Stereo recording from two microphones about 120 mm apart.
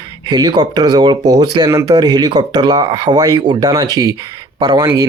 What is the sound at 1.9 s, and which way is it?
Speech, 35° right (ahead or behind).